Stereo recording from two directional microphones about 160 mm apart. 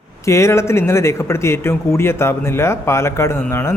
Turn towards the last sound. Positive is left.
turn(degrees=15)  # may be behind; listen again after turning